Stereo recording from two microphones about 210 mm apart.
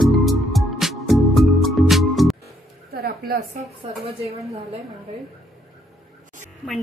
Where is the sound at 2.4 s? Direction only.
50° right (ahead or behind).